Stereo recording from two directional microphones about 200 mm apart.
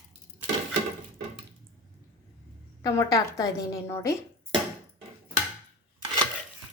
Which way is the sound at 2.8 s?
20° left (ahead or behind).